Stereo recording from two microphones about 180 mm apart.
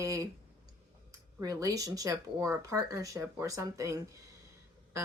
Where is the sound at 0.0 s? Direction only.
20° right (ahead or behind).